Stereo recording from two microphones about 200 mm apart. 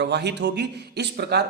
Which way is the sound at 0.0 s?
55° right (ahead or behind).